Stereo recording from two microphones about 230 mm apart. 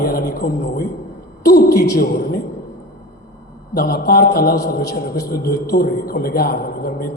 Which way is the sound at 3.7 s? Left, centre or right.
Left.